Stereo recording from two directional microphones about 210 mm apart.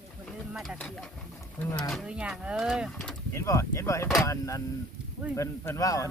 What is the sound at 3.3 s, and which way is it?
Speech, 15° left (ahead or behind).